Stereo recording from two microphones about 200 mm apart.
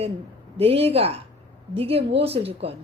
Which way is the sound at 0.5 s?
30° right (ahead or behind).